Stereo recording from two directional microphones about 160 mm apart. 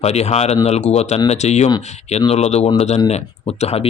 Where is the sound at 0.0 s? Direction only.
40° left (ahead or behind).